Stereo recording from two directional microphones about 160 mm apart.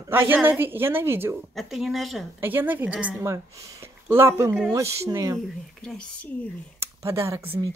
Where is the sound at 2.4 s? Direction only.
10° right (ahead or behind).